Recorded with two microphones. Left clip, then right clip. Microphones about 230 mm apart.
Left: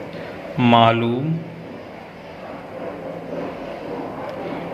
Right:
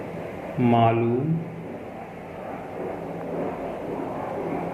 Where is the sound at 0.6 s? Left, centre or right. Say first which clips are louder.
Left 6 dB; left.